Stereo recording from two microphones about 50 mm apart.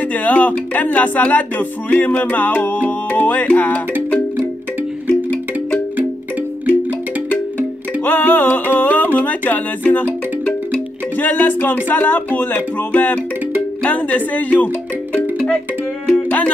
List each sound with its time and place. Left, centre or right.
0.1 s music: left
5.0 s music: left
7.2 s music: left